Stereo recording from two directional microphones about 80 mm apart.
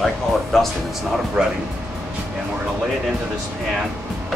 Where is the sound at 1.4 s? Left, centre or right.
Centre.